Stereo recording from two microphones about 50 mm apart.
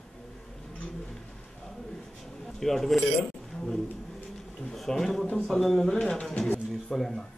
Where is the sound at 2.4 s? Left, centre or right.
Centre.